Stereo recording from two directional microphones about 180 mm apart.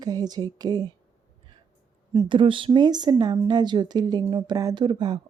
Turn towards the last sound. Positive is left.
turn(degrees=-25)  # may be behind; listen again after turning